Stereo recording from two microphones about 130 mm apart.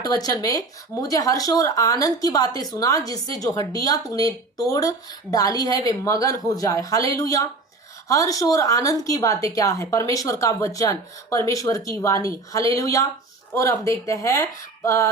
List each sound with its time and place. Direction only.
0.0 s a woman's voice: 30° left (ahead or behind)